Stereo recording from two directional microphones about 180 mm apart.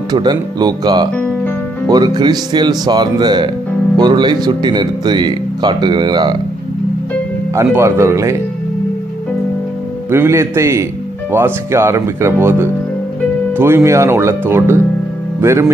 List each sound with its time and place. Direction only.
0.1 s speech: 25° right (ahead or behind)
7.5 s speech: 15° right (ahead or behind)
10.1 s speech: 15° right (ahead or behind)